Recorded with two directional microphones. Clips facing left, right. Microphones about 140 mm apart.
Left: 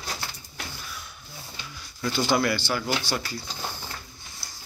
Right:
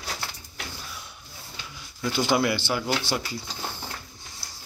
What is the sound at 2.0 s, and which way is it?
Speech, 15° right (ahead or behind).